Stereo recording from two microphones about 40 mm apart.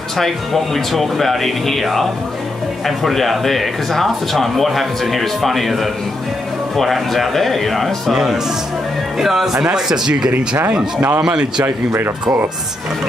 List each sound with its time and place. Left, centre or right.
0.2 s speech: centre
8.1 s speech: centre
11.6 s speech: right